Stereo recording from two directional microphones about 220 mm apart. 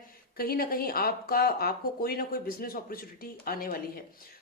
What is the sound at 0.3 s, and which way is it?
A woman's voice, 40° left (ahead or behind).